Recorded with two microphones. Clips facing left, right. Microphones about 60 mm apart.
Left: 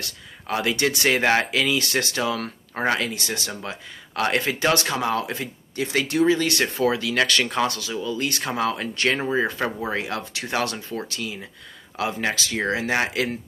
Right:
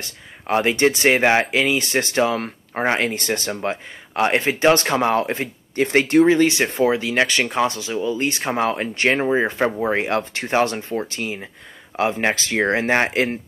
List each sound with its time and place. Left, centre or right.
0.0 s speech: right
3.0 s speech: right
6.4 s speech: right
10.0 s speech: right